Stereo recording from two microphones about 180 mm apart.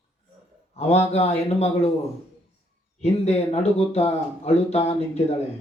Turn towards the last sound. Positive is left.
turn(degrees=35)  # may be behind; listen again after turning